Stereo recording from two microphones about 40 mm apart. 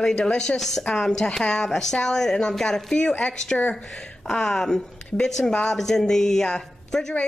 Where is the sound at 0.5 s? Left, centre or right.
Centre.